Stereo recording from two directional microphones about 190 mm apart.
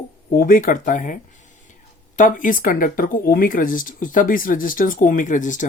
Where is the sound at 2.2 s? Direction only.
45° left (ahead or behind).